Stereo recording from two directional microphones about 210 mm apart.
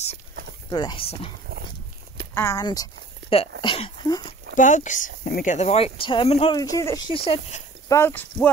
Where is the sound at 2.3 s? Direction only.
15° left (ahead or behind).